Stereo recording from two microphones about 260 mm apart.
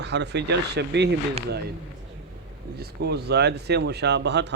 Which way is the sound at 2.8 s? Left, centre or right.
Right.